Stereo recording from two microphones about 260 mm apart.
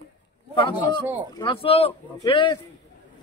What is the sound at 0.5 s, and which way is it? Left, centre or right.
Speech, centre.